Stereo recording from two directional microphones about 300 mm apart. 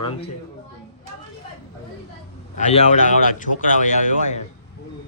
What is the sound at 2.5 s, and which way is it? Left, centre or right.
Speech, left.